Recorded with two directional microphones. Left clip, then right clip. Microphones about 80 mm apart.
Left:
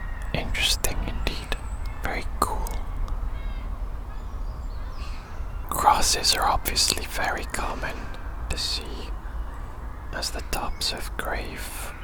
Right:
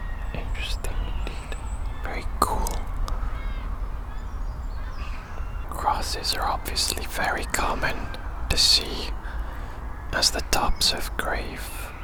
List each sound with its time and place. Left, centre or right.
0.3 s whispering: left
2.0 s whispering: left
2.6 s a sound: centre
5.6 s speech: left; by 11.7 s centre